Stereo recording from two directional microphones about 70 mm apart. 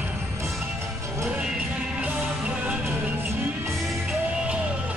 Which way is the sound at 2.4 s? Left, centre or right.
Centre.